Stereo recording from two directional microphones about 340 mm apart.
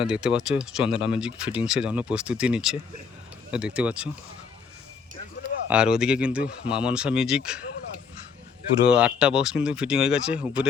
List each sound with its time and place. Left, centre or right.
0.0 s speech: centre
5.6 s speech: centre
8.9 s speech: centre